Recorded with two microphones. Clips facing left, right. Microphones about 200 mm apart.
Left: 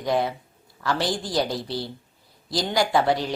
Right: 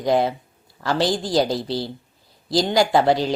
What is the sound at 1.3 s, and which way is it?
Speech, 30° right (ahead or behind).